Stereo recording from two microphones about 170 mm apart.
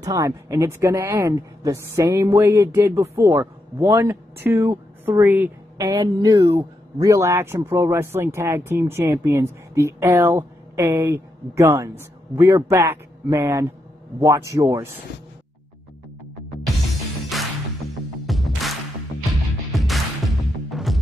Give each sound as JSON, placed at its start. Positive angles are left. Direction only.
{"t": 0.0, "sound": "speech", "side_deg": -15}
{"t": 17.3, "sound": "music", "side_deg": 0}